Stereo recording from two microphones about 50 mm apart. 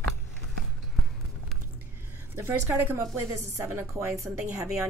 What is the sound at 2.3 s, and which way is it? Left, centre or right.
Speech, right.